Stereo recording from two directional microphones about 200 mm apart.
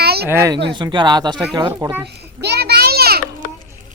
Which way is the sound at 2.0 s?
55° right (ahead or behind).